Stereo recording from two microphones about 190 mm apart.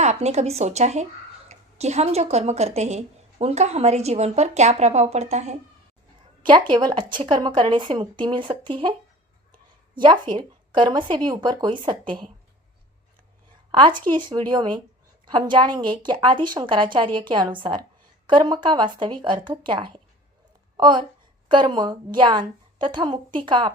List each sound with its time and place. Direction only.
0.0 s a woman's voice: 35° right (ahead or behind)
6.4 s a woman's voice: 25° right (ahead or behind)
13.7 s a woman's voice: 25° right (ahead or behind)